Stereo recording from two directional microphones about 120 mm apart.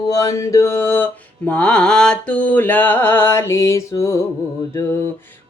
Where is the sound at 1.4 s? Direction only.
10° left (ahead or behind); by 4.2 s 25° left (ahead or behind).